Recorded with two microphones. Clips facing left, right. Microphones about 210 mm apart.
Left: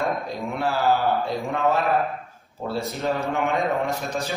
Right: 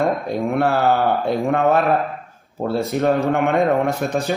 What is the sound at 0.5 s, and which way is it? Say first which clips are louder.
A man's voice: right 4 dB; 60° right (ahead or behind).